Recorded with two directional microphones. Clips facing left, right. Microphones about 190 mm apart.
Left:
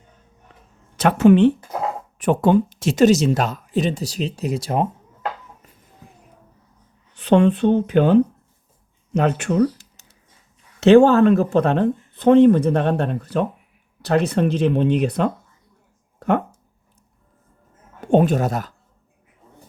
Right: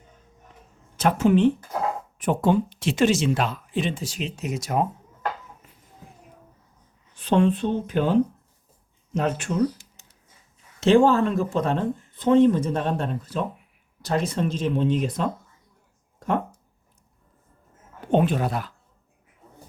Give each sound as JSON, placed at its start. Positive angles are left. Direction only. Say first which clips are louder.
{"t": 0.9, "sound": "speech", "louder": "left 6 dB", "side_deg": 75}
{"t": 2.6, "sound": "speech", "louder": "left 6 dB", "side_deg": 45}
{"t": 7.1, "sound": "speech", "louder": "left 5 dB", "side_deg": 70}
{"t": 10.8, "sound": "speech", "louder": "left 6 dB", "side_deg": 70}
{"t": 18.1, "sound": "speech", "louder": "left 5 dB", "side_deg": 45}